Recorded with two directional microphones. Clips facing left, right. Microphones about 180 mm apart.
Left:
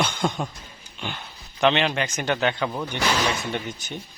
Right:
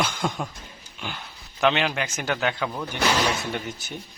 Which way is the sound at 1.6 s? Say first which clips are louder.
Left 2 dB; 5° right (ahead or behind).